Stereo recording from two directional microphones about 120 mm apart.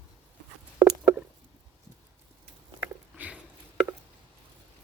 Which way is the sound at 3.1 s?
10° right (ahead or behind).